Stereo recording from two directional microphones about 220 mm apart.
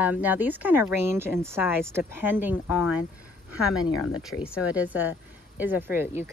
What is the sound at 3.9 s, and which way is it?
Speech, 75° left (ahead or behind).